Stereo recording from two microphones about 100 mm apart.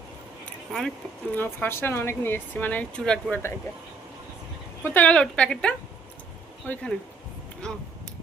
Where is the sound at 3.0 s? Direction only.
5° left (ahead or behind).